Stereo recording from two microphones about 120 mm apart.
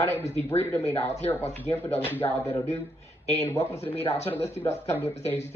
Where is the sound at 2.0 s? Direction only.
15° left (ahead or behind).